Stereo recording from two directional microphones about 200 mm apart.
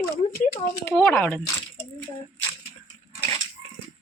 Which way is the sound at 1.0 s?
10° left (ahead or behind).